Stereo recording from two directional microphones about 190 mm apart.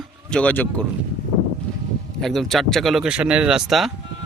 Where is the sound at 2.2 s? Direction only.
Centre (ahead or behind).